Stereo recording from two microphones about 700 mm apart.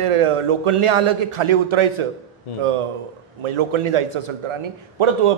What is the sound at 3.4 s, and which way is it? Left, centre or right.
A man's voice, right.